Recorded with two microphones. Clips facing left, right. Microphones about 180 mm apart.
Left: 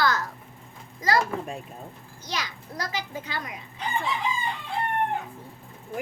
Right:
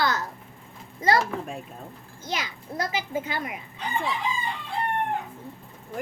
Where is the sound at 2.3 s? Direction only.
20° right (ahead or behind).